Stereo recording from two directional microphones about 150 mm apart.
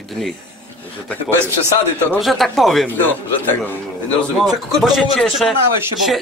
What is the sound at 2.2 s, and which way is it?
Speech, centre (ahead or behind).